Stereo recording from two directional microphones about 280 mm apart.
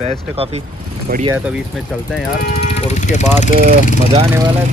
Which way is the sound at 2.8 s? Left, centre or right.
Left.